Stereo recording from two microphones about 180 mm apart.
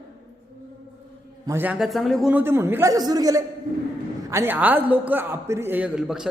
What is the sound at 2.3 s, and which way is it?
A man's voice, 10° right (ahead or behind).